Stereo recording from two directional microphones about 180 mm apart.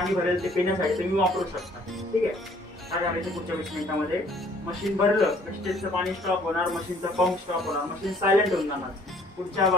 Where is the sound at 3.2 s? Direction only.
Centre (ahead or behind).